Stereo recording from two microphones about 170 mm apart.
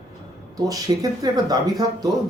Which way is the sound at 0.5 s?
20° right (ahead or behind).